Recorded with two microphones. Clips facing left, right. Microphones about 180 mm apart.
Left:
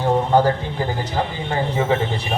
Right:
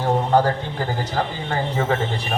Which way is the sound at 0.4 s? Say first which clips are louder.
Left 2 dB; 20° left (ahead or behind).